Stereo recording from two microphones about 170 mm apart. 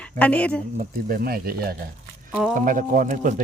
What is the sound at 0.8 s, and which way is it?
Speech, 60° right (ahead or behind).